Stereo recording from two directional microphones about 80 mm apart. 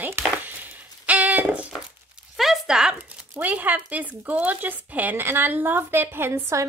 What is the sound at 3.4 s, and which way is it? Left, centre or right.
Speech, right.